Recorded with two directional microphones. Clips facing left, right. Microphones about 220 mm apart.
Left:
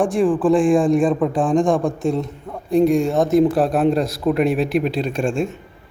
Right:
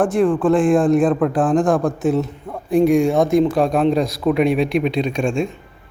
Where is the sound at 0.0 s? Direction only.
Centre (ahead or behind).